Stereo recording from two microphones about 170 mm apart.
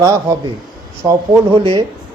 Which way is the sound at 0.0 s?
20° right (ahead or behind).